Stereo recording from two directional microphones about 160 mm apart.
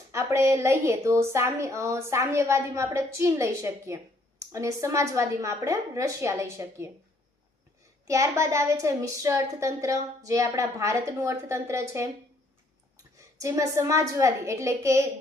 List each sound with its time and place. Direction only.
0.1 s a woman's voice: 20° right (ahead or behind)
8.0 s a woman's voice: 20° right (ahead or behind)
13.1 s a woman's voice: 20° right (ahead or behind)